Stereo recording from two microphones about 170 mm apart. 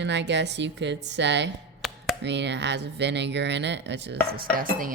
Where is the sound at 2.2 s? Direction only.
90° right.